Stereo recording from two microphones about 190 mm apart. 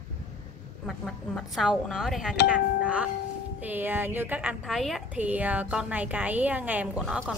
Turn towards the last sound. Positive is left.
turn(degrees=0)  # may be behind; listen again after turning